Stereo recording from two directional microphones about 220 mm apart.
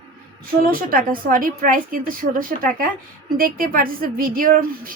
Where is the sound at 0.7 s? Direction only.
40° right (ahead or behind).